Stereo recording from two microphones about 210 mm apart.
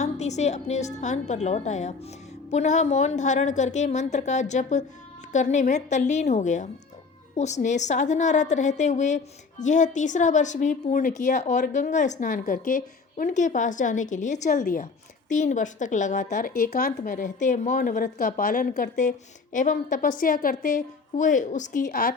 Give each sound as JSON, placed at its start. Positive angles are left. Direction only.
{"t": 0.0, "sound": "speech", "side_deg": 30}